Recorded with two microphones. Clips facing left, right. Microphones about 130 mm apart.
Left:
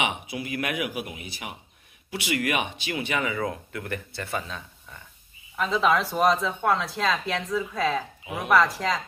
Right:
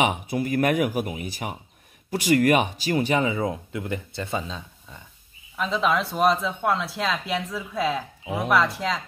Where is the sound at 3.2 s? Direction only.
25° right (ahead or behind).